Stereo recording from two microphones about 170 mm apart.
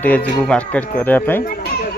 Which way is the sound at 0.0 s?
10° left (ahead or behind).